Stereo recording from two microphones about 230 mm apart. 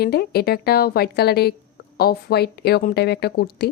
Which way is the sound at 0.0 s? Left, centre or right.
Left.